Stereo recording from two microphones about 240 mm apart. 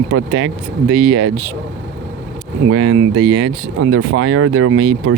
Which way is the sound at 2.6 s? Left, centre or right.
Right.